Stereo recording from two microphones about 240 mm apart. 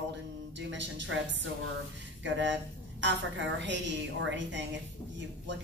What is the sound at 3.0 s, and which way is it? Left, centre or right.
Speech, right.